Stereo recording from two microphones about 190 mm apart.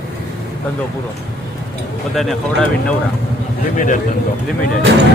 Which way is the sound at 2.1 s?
Centre (ahead or behind).